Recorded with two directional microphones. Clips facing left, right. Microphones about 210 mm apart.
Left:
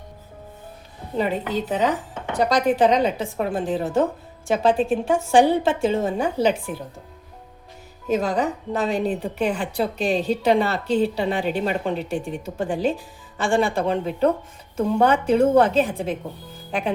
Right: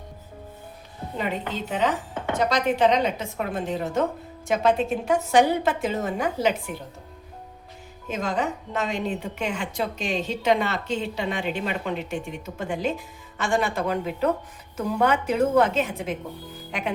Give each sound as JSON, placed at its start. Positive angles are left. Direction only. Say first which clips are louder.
{"t": 1.1, "sound": "a woman's voice", "louder": "left 6 dB", "side_deg": 35}
{"t": 8.0, "sound": "a woman's voice", "louder": "left 5 dB", "side_deg": 35}